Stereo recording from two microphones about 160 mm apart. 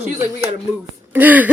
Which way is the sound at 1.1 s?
10° right (ahead or behind).